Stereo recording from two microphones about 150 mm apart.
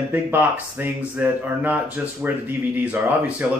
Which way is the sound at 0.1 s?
15° right (ahead or behind).